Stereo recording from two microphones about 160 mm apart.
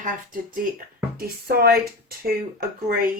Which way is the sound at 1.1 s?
70° right (ahead or behind).